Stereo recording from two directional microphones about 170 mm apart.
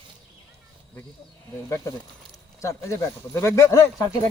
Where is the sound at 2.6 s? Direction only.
15° left (ahead or behind).